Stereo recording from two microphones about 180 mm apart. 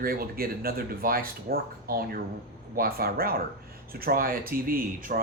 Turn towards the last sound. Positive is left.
turn(degrees=-50)  # may be behind; listen again after turning